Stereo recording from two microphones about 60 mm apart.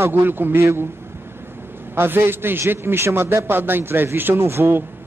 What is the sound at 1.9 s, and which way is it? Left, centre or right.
A man's voice, right.